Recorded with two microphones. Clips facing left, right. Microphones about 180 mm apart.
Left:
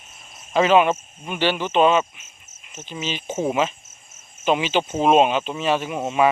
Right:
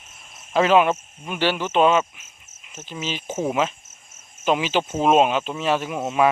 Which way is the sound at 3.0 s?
5° right (ahead or behind).